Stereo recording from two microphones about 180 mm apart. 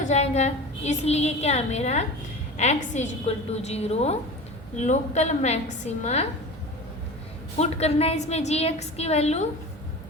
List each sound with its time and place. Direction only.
0.0 s a woman's voice: 40° left (ahead or behind)
7.6 s a woman's voice: 35° left (ahead or behind)